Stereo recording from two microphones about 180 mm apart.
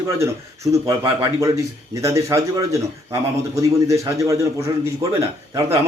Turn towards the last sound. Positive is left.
turn(degrees=-15)  # may be behind; listen again after turning